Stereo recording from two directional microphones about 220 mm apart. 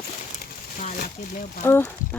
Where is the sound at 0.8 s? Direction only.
35° left (ahead or behind).